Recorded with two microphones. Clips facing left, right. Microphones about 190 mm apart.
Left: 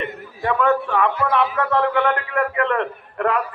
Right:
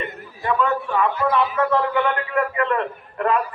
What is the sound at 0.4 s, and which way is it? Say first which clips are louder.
A man's voice: left 3 dB; 65° left (ahead or behind).